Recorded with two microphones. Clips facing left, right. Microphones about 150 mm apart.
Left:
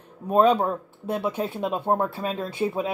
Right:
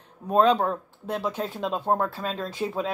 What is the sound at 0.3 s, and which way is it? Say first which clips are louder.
Speech: left 1 dB; 10° left (ahead or behind).